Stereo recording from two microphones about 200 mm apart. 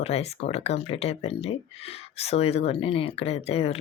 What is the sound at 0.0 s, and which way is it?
Speech, 30° left (ahead or behind).